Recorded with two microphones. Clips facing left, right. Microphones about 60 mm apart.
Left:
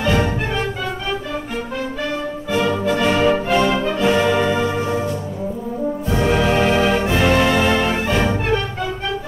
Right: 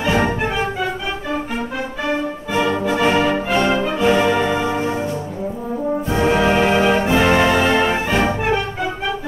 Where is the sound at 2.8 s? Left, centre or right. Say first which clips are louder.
Right 1 dB; centre.